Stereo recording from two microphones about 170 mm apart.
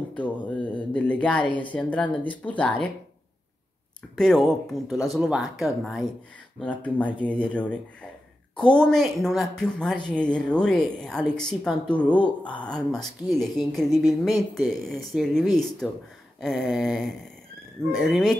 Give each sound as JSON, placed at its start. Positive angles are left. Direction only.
{"t": 0.1, "sound": "speech", "side_deg": 10}
{"t": 4.2, "sound": "speech", "side_deg": 0}